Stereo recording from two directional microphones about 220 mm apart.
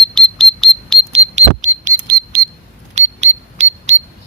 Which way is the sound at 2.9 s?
30° right (ahead or behind).